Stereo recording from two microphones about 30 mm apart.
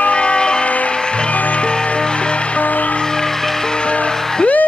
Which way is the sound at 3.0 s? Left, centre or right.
Centre.